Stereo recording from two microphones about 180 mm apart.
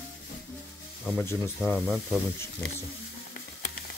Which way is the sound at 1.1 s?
15° left (ahead or behind).